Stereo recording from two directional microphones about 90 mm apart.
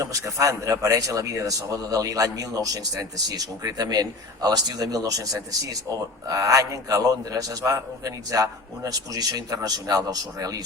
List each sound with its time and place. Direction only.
0.0 s speech: 40° right (ahead or behind)